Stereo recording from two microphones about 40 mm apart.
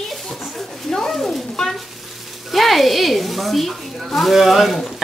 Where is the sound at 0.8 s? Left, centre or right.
Centre.